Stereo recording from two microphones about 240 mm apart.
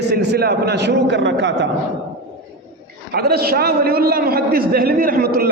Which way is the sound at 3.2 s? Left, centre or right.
Right.